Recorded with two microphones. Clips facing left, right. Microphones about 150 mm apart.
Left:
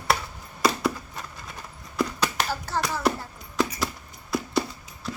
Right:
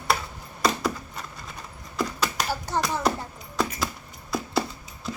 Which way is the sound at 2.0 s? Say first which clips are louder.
Left 1 dB; 5° left (ahead or behind).